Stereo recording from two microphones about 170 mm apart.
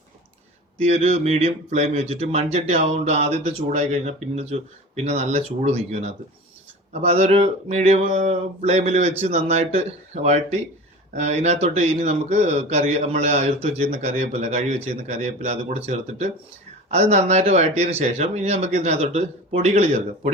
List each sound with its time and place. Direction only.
0.8 s speech: 40° right (ahead or behind)